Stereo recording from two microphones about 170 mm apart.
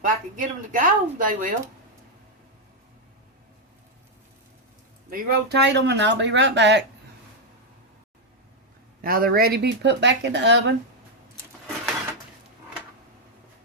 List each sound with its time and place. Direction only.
0.0 s speech: 50° right (ahead or behind)
5.1 s speech: 70° right (ahead or behind); by 6.8 s 90° right
9.0 s speech: 60° right (ahead or behind); by 10.8 s 90° right